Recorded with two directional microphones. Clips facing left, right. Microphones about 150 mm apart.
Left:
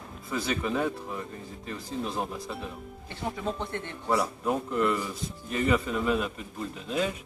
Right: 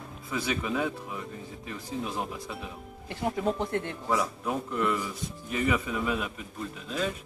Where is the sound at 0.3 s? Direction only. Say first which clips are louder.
Left 1 dB; 5° right (ahead or behind).